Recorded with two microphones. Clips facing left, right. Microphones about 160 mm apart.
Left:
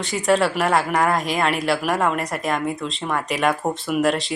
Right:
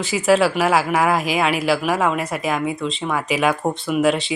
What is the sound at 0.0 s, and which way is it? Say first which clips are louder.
Speech: right 3 dB; 5° right (ahead or behind).